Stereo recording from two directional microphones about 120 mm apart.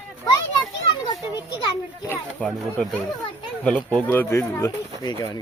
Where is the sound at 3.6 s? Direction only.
10° left (ahead or behind).